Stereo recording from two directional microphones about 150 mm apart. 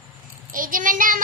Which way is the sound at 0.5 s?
65° right (ahead or behind).